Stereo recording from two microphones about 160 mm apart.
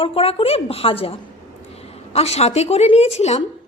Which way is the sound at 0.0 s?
35° left (ahead or behind).